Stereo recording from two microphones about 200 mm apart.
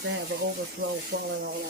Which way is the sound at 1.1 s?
55° right (ahead or behind).